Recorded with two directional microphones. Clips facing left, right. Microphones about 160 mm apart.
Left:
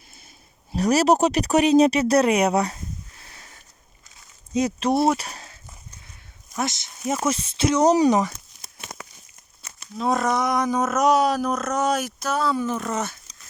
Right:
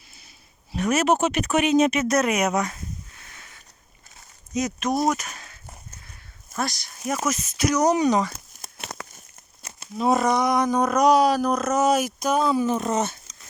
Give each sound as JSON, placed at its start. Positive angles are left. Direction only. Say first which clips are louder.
{"t": 0.7, "sound": "speech", "louder": "left 3 dB", "side_deg": 35}
{"t": 3.2, "sound": "a sound", "louder": "left 1 dB", "side_deg": 35}
{"t": 4.5, "sound": "speech", "louder": "left 3 dB", "side_deg": 30}
{"t": 6.6, "sound": "speech", "louder": "left 1 dB", "side_deg": 20}
{"t": 8.8, "sound": "crumpling", "louder": "right 3 dB", "side_deg": -75}
{"t": 10.0, "sound": "speech", "louder": "right 2 dB", "side_deg": -5}